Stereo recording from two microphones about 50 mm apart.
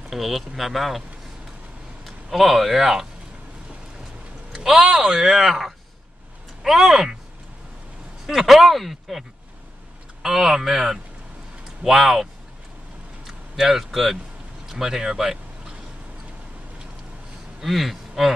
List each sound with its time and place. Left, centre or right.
0.1 s speech: centre
2.0 s speech: centre
4.8 s speech: centre
8.3 s speech: centre
10.2 s speech: centre
13.6 s speech: centre
17.6 s speech: centre